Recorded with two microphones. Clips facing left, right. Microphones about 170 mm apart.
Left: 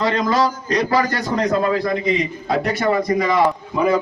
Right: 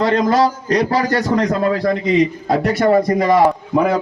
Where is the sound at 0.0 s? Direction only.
55° right (ahead or behind).